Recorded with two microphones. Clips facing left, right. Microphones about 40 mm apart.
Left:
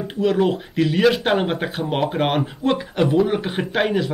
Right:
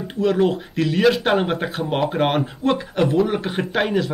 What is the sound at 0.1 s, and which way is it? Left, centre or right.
Speech, centre.